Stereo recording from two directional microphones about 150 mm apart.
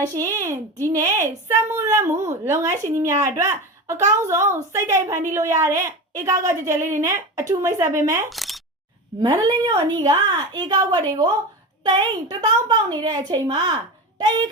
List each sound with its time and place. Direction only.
0.0 s a woman's voice: 20° right (ahead or behind)
8.3 s a sound: centre (ahead or behind)
9.2 s a woman's voice: 30° right (ahead or behind)